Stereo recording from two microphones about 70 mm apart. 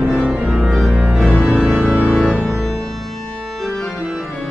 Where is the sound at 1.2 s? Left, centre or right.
Left.